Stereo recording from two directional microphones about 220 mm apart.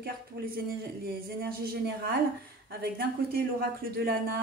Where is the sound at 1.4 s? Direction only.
45° right (ahead or behind).